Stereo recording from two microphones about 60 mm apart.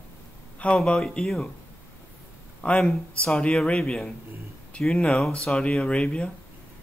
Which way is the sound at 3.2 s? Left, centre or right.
Centre.